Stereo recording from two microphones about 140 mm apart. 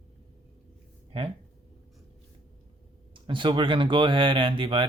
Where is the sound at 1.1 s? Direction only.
40° right (ahead or behind).